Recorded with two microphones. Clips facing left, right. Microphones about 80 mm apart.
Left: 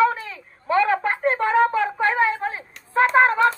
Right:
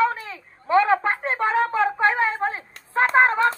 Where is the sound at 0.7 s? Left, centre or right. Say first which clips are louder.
Right 1 dB; right.